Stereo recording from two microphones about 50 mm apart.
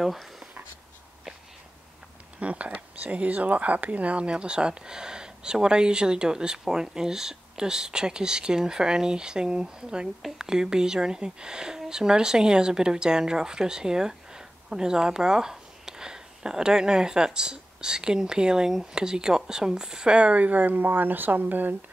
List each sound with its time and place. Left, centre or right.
0.0 s speech: centre
2.3 s speech: right